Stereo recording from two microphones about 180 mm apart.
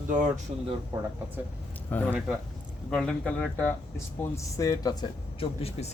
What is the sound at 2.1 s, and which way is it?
Speech, 5° right (ahead or behind).